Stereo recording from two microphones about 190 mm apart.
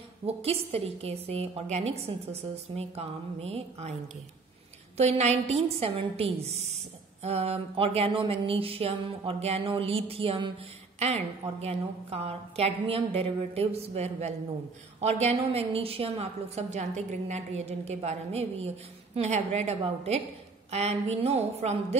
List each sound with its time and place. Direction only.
0.4 s a woman's voice: 30° right (ahead or behind)
4.9 s a woman's voice: 35° right (ahead or behind)
7.2 s a sound: 35° right (ahead or behind)
11.0 s a woman's voice: 35° right (ahead or behind)